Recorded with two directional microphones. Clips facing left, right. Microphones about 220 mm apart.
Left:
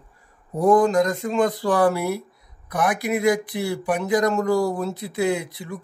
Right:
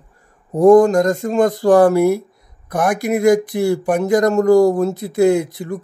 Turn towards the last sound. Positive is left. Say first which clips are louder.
# right 9 dB
turn(degrees=-45)  # may be behind; listen again after turning